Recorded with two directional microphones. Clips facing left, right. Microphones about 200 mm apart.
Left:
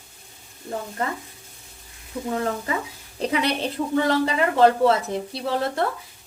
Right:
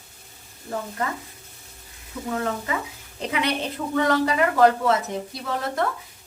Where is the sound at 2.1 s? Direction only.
30° left (ahead or behind).